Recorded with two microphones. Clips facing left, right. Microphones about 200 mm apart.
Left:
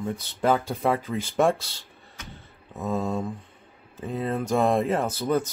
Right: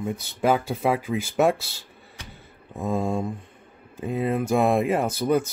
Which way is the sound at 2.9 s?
10° right (ahead or behind).